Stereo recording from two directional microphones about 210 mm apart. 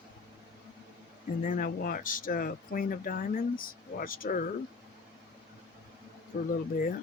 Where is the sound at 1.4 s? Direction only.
40° left (ahead or behind).